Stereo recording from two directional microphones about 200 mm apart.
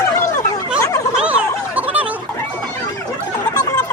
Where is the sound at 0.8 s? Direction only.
15° left (ahead or behind).